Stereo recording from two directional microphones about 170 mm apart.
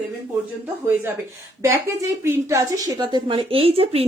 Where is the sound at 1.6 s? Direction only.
15° right (ahead or behind).